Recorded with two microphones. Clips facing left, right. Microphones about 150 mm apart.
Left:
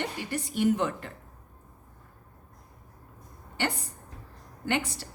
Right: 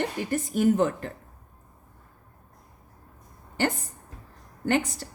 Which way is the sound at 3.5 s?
45° right (ahead or behind).